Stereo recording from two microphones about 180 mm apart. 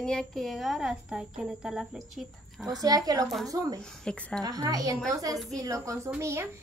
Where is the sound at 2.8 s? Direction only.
20° right (ahead or behind).